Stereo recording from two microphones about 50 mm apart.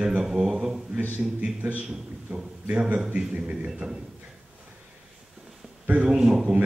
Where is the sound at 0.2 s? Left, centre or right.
Centre.